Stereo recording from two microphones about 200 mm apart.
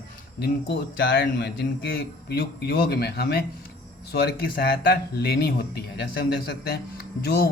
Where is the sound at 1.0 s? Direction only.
60° left (ahead or behind).